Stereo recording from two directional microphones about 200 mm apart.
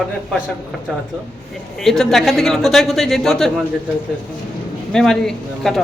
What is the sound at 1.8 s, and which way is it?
Speech, centre (ahead or behind).